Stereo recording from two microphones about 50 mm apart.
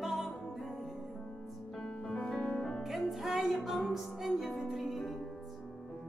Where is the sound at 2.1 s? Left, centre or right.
Centre.